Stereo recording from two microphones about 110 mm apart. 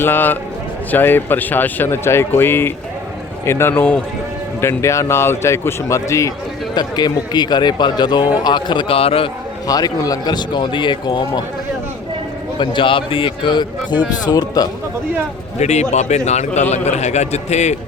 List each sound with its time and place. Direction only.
0.0 s speech: 20° left (ahead or behind)
6.7 s a man's voice: 40° left (ahead or behind); by 9.3 s 60° left (ahead or behind)
9.6 s a man's voice: 35° left (ahead or behind)
12.5 s a man's voice: 50° left (ahead or behind)
15.5 s a man's voice: 90° left